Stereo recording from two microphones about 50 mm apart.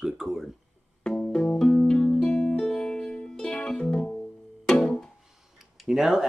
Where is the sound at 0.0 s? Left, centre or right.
Centre.